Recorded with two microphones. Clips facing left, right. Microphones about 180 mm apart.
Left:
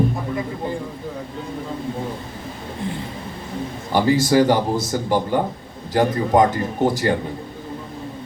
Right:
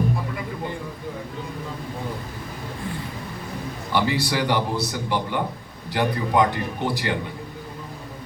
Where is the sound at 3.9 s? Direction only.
45° left (ahead or behind).